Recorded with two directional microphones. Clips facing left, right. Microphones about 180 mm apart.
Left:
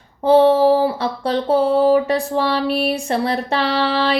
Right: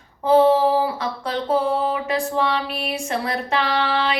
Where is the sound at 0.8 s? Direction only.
30° left (ahead or behind).